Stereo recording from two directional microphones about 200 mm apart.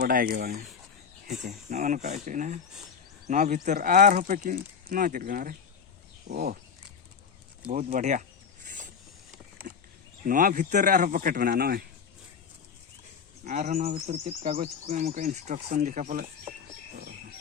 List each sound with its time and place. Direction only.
0.0 s speech: 45° right (ahead or behind)
7.7 s speech: 40° right (ahead or behind)
10.2 s speech: 45° right (ahead or behind)
13.4 s speech: 40° right (ahead or behind)